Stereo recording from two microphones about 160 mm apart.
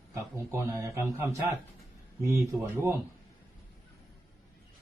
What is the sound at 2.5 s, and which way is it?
Speech, 5° right (ahead or behind).